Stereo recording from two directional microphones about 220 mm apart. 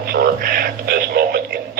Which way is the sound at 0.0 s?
45° right (ahead or behind).